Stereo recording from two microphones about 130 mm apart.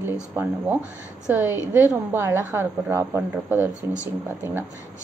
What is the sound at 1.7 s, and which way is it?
Speech, 15° right (ahead or behind).